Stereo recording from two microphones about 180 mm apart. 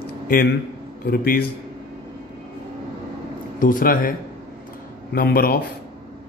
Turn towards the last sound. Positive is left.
turn(degrees=55)  # may be behind; listen again after turning